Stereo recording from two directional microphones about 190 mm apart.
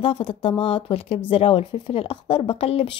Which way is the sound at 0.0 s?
30° left (ahead or behind).